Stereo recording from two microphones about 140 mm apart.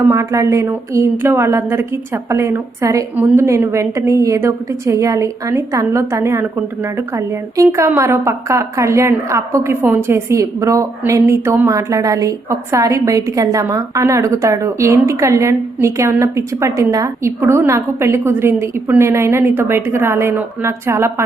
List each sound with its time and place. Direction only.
0.1 s a woman's voice: 20° right (ahead or behind)